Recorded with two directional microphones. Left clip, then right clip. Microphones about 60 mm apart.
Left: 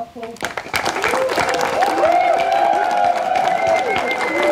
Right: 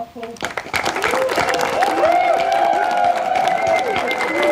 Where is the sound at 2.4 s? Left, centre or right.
Centre.